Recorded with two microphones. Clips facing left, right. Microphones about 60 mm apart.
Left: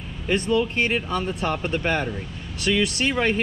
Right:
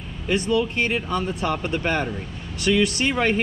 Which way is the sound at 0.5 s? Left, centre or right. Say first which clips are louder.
Left 1 dB; centre.